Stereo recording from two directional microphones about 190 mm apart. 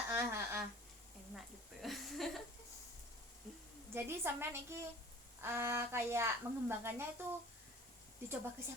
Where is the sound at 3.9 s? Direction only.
10° right (ahead or behind).